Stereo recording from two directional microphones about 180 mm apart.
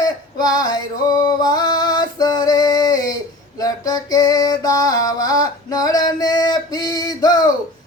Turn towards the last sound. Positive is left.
turn(degrees=20)  # may be behind; listen again after turning